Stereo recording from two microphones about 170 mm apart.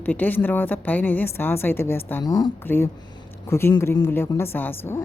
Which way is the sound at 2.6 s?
10° left (ahead or behind).